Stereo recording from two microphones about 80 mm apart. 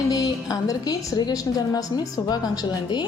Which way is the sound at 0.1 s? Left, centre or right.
Left.